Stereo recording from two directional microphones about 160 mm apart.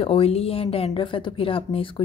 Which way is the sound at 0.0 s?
35° left (ahead or behind).